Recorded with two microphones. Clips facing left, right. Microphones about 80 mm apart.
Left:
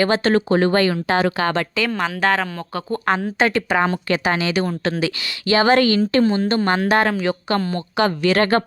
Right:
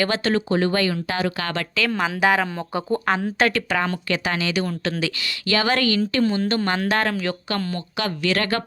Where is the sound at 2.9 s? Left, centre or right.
Centre.